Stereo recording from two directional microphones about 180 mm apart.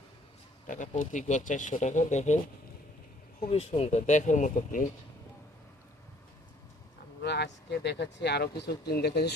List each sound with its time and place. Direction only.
0.7 s speech: 45° left (ahead or behind)
3.4 s speech: 35° left (ahead or behind)
7.2 s speech: 70° left (ahead or behind)